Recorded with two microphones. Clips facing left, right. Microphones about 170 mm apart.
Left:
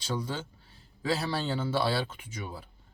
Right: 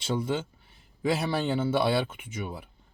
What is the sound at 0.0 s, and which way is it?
Speech, 25° right (ahead or behind).